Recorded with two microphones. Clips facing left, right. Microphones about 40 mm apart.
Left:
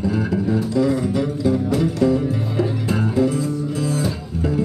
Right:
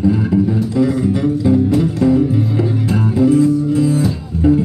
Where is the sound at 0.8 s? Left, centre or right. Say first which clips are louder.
Right 5 dB; centre.